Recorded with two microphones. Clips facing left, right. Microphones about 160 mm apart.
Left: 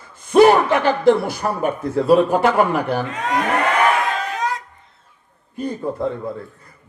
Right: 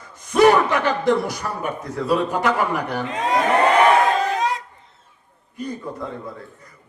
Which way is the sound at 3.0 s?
25° right (ahead or behind).